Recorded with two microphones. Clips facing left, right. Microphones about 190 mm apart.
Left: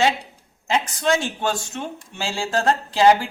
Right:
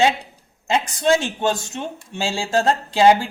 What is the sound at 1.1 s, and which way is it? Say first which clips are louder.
Speech: right 4 dB; 20° right (ahead or behind).